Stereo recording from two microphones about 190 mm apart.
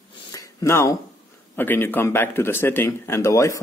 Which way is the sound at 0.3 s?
20° left (ahead or behind).